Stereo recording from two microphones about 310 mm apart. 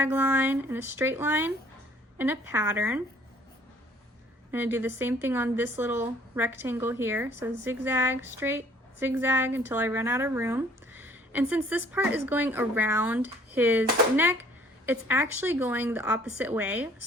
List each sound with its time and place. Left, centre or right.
0.0 s a woman's voice: centre
4.5 s a woman's voice: centre